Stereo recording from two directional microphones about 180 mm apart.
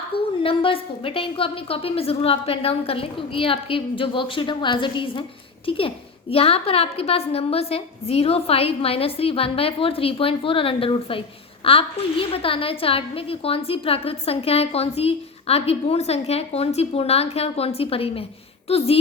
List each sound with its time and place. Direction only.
0.4 s a woman's voice: 30° left (ahead or behind)